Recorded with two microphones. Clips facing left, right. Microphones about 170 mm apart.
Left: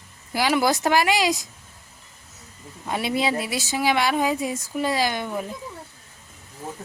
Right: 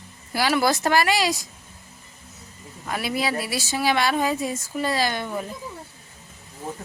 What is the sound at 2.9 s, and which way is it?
Speech, 25° left (ahead or behind).